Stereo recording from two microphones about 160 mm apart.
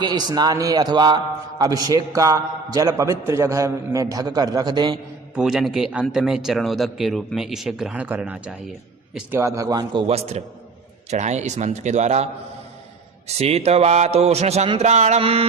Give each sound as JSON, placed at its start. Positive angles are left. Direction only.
{"t": 0.0, "sound": "a man's voice", "side_deg": -25}
{"t": 5.3, "sound": "a man's voice", "side_deg": -5}
{"t": 9.4, "sound": "a man's voice", "side_deg": -20}